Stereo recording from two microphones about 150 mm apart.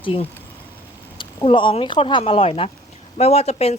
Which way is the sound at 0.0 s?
35° left (ahead or behind).